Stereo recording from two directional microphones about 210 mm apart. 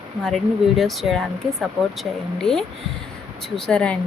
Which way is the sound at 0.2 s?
Centre (ahead or behind).